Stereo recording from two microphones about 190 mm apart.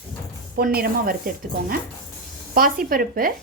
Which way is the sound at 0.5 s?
50° right (ahead or behind).